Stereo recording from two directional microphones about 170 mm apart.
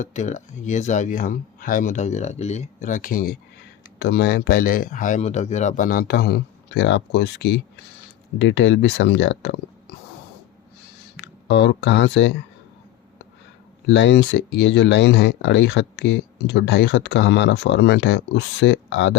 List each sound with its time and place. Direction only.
0.0 s speech: 45° left (ahead or behind)
3.9 s speech: 75° left (ahead or behind)
11.2 s speech: 90° left
13.9 s speech: 90° left